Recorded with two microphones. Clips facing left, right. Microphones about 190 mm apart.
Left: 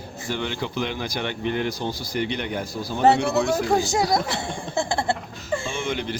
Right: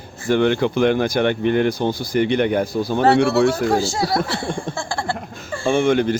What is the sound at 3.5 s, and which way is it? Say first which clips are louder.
Speech: right 2 dB; 15° left (ahead or behind).